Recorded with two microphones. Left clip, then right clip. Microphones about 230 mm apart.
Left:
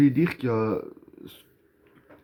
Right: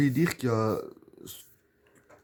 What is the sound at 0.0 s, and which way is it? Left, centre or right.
Speech, right.